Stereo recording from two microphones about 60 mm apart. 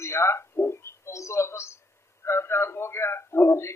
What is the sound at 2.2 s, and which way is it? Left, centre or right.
A man's voice, left.